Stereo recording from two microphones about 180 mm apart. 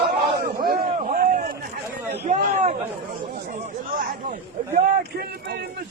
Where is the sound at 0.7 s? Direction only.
50° right (ahead or behind).